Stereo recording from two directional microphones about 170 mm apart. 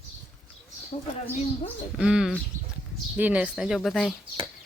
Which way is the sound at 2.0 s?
5° right (ahead or behind).